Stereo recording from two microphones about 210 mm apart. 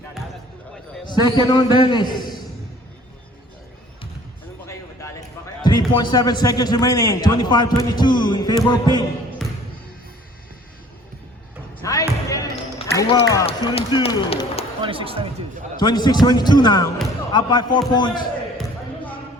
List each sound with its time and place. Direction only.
1.0 s a man's voice: 20° left (ahead or behind)
4.6 s a sound: 15° left (ahead or behind)
5.6 s a man's voice: 20° left (ahead or behind)
11.8 s basketball bounce: 15° left (ahead or behind)
13.0 s a man's voice: 15° left (ahead or behind)
14.8 s speech: 25° right (ahead or behind)
15.8 s a man's voice: 20° left (ahead or behind)